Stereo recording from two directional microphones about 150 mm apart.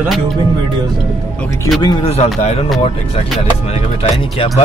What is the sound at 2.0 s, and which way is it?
Speech, 45° left (ahead or behind).